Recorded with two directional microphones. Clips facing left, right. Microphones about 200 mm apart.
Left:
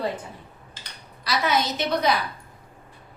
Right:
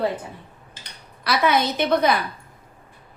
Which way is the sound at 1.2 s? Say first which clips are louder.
Right 4 dB; 60° right (ahead or behind).